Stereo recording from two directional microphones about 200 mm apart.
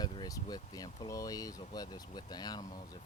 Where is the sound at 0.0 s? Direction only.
20° left (ahead or behind).